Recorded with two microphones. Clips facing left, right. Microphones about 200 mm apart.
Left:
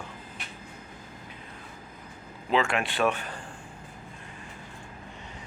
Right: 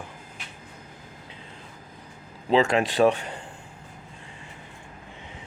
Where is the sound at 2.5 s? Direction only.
35° right (ahead or behind).